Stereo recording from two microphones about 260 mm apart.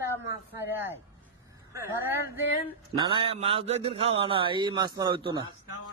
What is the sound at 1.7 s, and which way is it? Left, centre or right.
A man's voice, centre.